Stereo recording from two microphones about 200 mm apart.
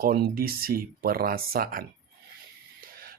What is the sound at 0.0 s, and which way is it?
Speech, 50° right (ahead or behind).